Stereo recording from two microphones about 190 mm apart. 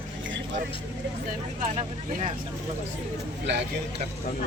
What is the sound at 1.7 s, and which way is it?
Speech, 35° right (ahead or behind).